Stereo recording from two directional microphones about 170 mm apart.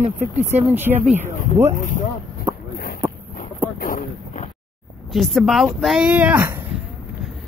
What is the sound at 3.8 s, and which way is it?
Boat, 55° left (ahead or behind).